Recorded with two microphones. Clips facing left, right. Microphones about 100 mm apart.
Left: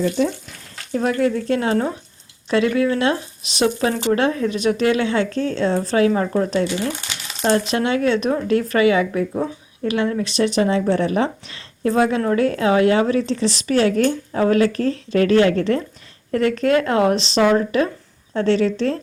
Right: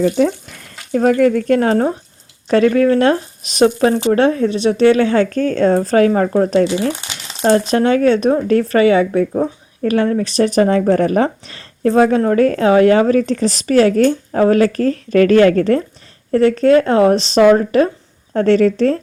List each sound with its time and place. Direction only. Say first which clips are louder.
0.2 s a woman's voice: right 5 dB; 55° right (ahead or behind)
1.3 s speech: right 6 dB; 65° right (ahead or behind)
1.5 s a woman's voice: right 5 dB; 40° right (ahead or behind)